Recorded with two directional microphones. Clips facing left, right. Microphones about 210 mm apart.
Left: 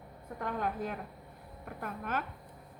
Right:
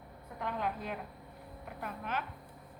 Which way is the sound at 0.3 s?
45° left (ahead or behind).